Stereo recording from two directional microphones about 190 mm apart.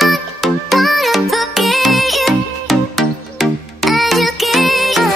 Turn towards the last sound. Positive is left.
turn(degrees=0)  # may be behind; listen again after turning